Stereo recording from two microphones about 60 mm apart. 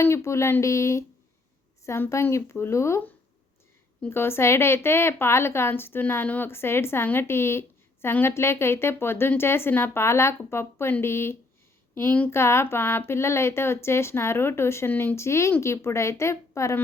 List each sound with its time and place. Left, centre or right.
0.0 s speech: left
4.1 s speech: left
6.5 s speech: left